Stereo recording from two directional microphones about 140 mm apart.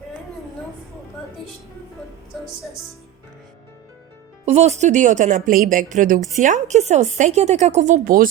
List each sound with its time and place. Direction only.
4.4 s a woman's voice: 50° right (ahead or behind); by 6.1 s 70° right (ahead or behind)
6.4 s a woman's voice: 60° right (ahead or behind); by 8.3 s 80° right